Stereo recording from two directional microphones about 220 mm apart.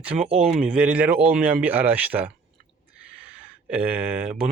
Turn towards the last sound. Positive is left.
turn(degrees=-5)  # may be behind; listen again after turning